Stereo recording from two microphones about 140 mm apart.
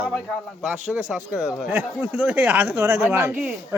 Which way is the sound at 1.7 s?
15° right (ahead or behind).